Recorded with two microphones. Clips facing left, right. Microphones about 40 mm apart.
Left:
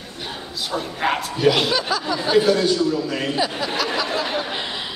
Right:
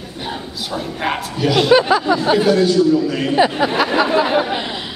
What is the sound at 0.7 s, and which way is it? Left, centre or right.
Speech, centre.